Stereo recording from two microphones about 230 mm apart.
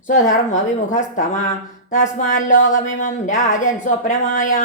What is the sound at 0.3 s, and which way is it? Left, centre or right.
Speech, left.